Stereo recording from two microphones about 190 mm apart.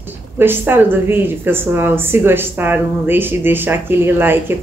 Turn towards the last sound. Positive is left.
turn(degrees=-10)  # may be behind; listen again after turning